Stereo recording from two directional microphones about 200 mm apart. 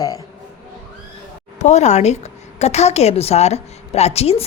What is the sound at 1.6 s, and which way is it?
A woman's voice, 35° left (ahead or behind).